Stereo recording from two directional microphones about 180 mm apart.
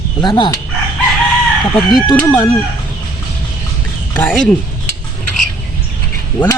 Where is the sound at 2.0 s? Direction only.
5° left (ahead or behind).